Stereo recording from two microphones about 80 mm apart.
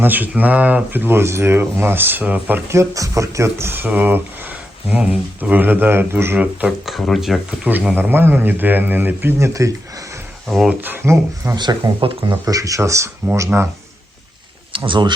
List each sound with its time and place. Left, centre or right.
0.0 s speech: right
2.7 s speech: right
6.4 s speech: centre
6.8 s speech: centre
7.6 s speech: centre
9.5 s speech: right
10.8 s speech: right
11.0 s speech: right
11.5 s speech: right
12.5 s speech: right
13.5 s speech: right
14.8 s speech: right